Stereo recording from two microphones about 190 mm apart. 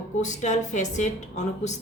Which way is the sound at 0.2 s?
40° left (ahead or behind).